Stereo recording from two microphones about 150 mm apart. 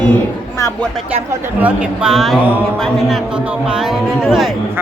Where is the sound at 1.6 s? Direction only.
10° right (ahead or behind).